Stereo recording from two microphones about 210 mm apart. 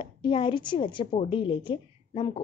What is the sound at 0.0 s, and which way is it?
A woman's voice, 25° left (ahead or behind).